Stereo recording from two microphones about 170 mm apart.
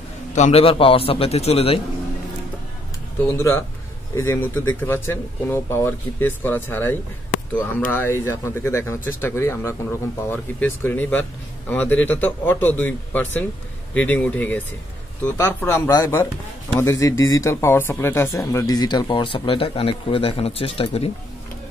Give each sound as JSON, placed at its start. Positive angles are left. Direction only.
{"t": 0.3, "sound": "a man's voice", "side_deg": 40}
{"t": 3.3, "sound": "speech", "side_deg": 15}